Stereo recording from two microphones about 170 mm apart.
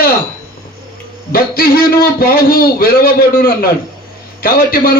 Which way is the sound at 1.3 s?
60° left (ahead or behind).